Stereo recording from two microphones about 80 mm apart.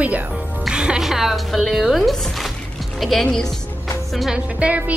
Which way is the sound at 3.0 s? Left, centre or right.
Centre.